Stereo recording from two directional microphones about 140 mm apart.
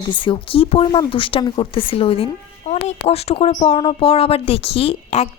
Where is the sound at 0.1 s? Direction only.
35° left (ahead or behind).